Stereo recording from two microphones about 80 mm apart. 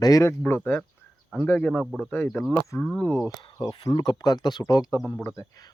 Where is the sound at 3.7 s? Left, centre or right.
Left.